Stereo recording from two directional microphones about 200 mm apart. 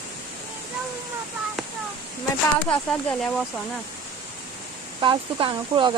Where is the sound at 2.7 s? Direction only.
5° left (ahead or behind).